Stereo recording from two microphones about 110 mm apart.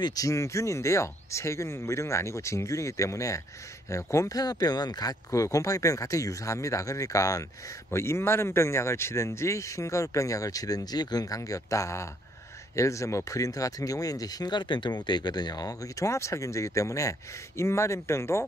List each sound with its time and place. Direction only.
0.0 s speech: 35° left (ahead or behind)